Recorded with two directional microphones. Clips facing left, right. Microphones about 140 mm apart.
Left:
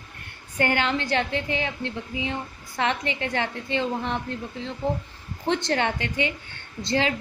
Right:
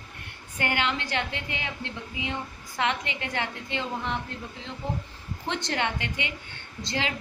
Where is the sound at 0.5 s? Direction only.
40° left (ahead or behind).